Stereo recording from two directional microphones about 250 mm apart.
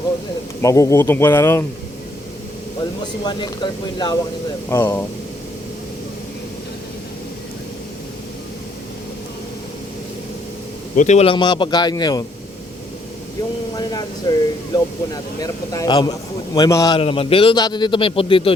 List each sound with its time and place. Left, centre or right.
0.6 s speech: centre
3.2 s speech: centre
10.9 s a man's voice: left
13.7 s a man's voice: centre